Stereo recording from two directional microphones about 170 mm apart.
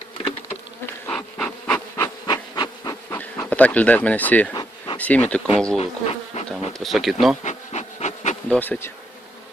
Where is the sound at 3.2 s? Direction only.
10° left (ahead or behind).